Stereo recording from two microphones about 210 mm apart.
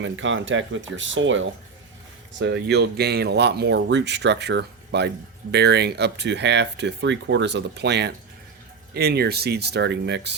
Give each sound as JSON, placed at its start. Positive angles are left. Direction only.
{"t": 0.0, "sound": "speech", "side_deg": -65}
{"t": 2.4, "sound": "speech", "side_deg": -55}